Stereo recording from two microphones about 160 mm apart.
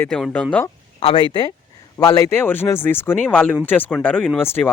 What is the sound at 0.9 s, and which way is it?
Speech, 35° left (ahead or behind).